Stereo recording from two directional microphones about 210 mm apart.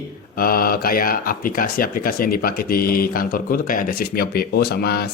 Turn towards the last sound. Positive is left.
turn(degrees=50)  # may be behind; listen again after turning